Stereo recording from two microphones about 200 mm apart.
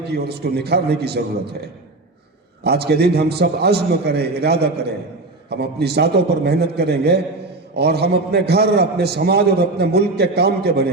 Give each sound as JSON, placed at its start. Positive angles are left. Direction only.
{"t": 0.0, "sound": "a man's voice", "side_deg": -55}
{"t": 2.6, "sound": "a man's voice", "side_deg": -55}